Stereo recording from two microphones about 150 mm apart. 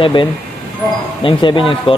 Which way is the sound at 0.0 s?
35° left (ahead or behind).